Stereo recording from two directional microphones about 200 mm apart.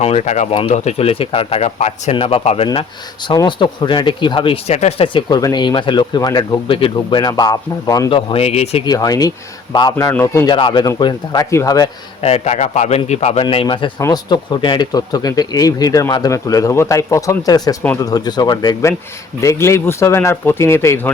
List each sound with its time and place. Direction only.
0.0 s a man's voice: 35° left (ahead or behind)
8.9 s speech: 20° left (ahead or behind)
12.2 s a man's voice: 35° left (ahead or behind); by 21.1 s 10° left (ahead or behind)